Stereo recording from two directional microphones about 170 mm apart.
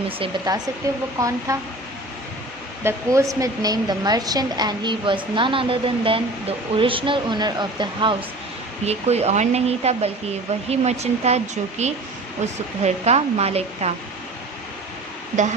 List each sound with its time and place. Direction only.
0.2 s a woman's voice: 25° right (ahead or behind)
2.8 s a woman's voice: 15° right (ahead or behind)
8.8 s speech: 40° right (ahead or behind)